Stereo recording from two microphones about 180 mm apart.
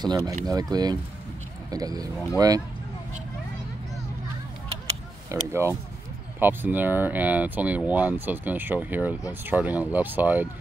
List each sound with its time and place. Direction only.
0.0 s speech: 20° right (ahead or behind)
5.3 s speech: 15° right (ahead or behind)